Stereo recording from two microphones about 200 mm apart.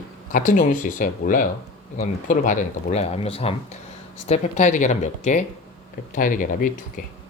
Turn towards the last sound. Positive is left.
turn(degrees=45)  # may be behind; listen again after turning